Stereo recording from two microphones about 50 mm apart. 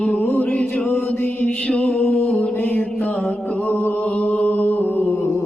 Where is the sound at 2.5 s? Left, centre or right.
Left.